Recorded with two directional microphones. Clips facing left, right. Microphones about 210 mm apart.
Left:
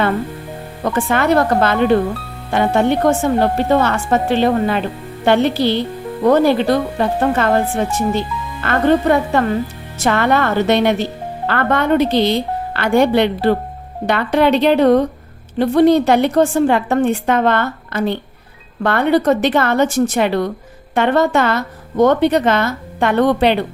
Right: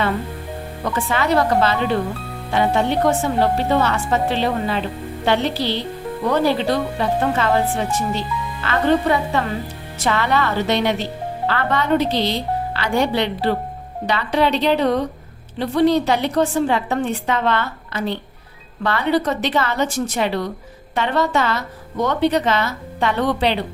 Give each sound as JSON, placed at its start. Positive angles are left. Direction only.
{"t": 0.9, "sound": "speech", "side_deg": 50}